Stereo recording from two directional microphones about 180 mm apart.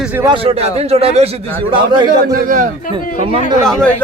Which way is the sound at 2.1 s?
50° right (ahead or behind).